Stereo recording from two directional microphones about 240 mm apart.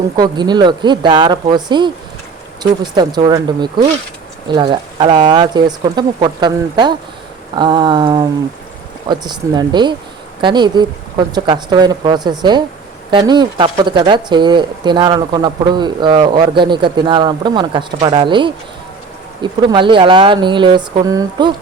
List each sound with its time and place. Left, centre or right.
0.2 s speech: centre